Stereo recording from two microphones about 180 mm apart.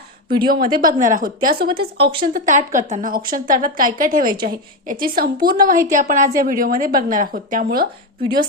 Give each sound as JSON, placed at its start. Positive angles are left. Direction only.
{"t": 0.3, "sound": "a woman's voice", "side_deg": -25}
{"t": 0.9, "sound": "a woman's voice", "side_deg": -45}